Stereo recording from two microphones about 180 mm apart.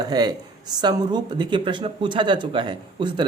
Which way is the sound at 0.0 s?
20° right (ahead or behind).